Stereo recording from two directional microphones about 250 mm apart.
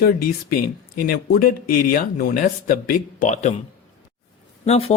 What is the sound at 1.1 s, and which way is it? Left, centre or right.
Speech, left.